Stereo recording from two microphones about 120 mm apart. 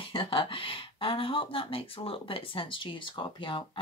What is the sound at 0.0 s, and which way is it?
Speech, 45° left (ahead or behind).